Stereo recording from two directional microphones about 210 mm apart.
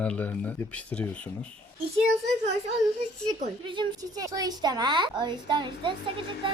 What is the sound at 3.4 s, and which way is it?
A woman's voice, 25° right (ahead or behind).